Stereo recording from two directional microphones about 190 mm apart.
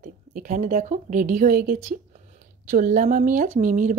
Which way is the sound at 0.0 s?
45° right (ahead or behind).